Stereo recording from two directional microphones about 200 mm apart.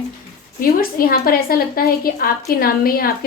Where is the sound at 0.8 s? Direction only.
45° left (ahead or behind).